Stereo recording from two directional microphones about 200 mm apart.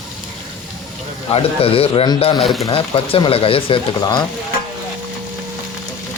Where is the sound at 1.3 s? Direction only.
30° left (ahead or behind).